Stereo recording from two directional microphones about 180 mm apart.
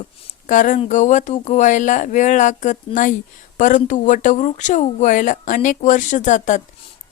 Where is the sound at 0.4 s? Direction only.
45° left (ahead or behind).